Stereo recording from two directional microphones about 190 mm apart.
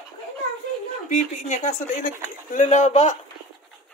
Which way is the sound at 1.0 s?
40° left (ahead or behind).